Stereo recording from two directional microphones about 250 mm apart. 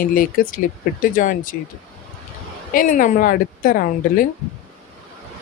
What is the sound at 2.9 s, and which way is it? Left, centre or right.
Speech, left.